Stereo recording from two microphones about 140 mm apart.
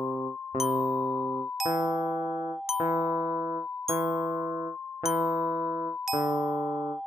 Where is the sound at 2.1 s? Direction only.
60° left (ahead or behind).